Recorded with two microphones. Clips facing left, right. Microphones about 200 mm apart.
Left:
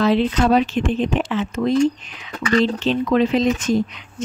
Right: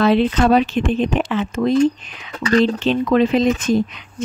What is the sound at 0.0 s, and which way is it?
Speech, 60° right (ahead or behind).